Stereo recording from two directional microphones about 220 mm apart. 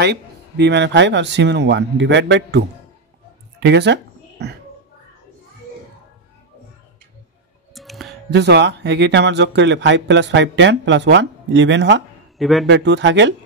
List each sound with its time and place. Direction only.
0.0 s speech: 50° right (ahead or behind)
3.5 s a sound: 50° right (ahead or behind)
7.7 s clicking: centre (ahead or behind)
8.3 s speech: 50° right (ahead or behind)
12.4 s a man's voice: centre (ahead or behind)
12.6 s speech: 55° right (ahead or behind)